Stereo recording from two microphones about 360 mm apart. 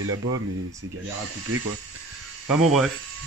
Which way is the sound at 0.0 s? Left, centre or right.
Right.